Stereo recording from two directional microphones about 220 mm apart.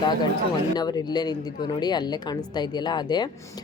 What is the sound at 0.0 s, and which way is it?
Speech, 20° left (ahead or behind).